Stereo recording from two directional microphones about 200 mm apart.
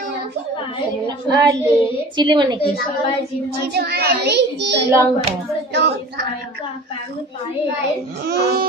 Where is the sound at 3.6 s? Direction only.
55° right (ahead or behind).